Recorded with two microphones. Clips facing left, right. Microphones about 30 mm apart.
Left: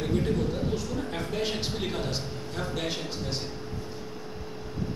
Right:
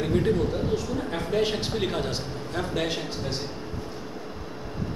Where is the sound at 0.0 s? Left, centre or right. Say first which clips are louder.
Right 4 dB; centre.